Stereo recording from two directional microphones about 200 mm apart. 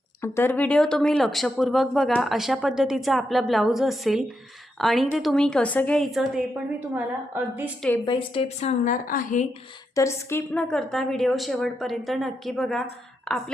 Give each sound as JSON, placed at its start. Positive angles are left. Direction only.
{"t": 0.2, "sound": "speech", "side_deg": 10}
{"t": 8.0, "sound": "a woman's voice", "side_deg": 25}
{"t": 8.8, "sound": "a woman's voice", "side_deg": 40}
{"t": 9.9, "sound": "speech", "side_deg": 15}